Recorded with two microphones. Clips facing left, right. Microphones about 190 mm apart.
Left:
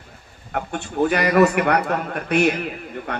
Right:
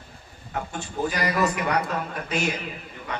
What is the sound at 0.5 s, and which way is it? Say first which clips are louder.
A man's voice: left 5 dB; 65° left (ahead or behind).